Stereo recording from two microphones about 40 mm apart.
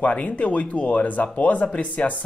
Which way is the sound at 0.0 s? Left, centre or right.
Left.